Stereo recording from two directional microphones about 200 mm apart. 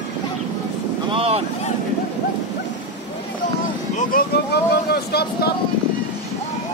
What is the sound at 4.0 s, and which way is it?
Speech, 45° left (ahead or behind).